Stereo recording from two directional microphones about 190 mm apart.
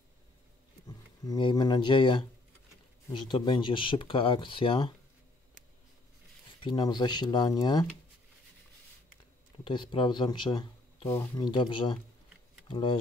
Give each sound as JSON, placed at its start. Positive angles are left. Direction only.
{"t": 0.8, "sound": "speech", "side_deg": 20}
{"t": 6.6, "sound": "speech", "side_deg": 25}
{"t": 9.7, "sound": "speech", "side_deg": 25}